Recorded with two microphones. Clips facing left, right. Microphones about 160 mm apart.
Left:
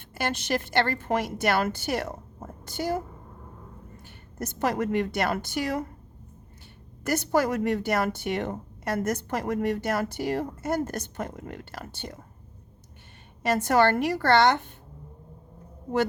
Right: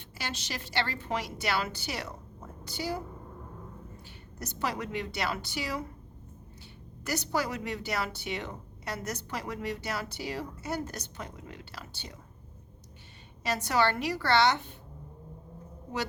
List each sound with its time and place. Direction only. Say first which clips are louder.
0.1 s speech: left 11 dB; 55° left (ahead or behind)
4.4 s speech: left 7 dB; 50° left (ahead or behind)
7.0 s speech: left 7 dB; 50° left (ahead or behind)
13.4 s speech: left 6 dB; 50° left (ahead or behind)